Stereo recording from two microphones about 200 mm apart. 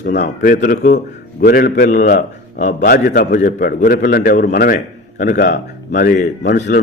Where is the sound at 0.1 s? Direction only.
55° left (ahead or behind).